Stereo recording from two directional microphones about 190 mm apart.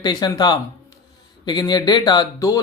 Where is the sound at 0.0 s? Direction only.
20° left (ahead or behind).